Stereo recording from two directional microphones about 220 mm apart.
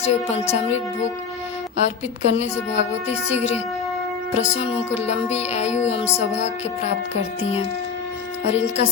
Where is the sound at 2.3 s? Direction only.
30° left (ahead or behind).